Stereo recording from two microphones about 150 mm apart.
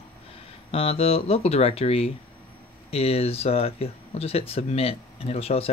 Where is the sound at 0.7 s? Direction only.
40° left (ahead or behind).